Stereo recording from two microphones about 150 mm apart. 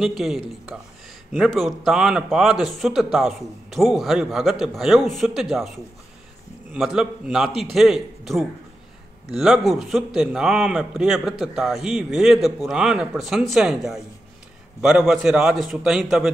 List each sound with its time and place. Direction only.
0.0 s a man's voice: centre (ahead or behind)